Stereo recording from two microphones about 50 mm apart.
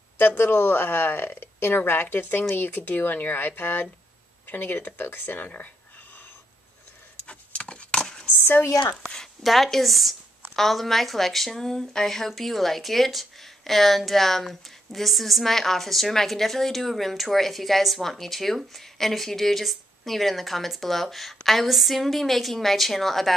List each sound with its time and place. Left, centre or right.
0.2 s speech: left
7.2 s wood: left
8.3 s speech: left
9.0 s a sound: centre
9.4 s speech: centre